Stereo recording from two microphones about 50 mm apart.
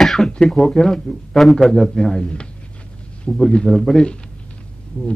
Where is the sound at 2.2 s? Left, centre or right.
Centre.